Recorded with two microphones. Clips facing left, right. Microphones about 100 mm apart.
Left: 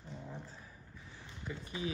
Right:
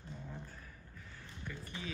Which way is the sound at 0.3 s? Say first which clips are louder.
Left 1 dB; 20° left (ahead or behind).